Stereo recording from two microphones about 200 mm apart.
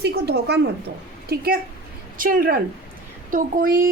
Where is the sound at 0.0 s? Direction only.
55° right (ahead or behind).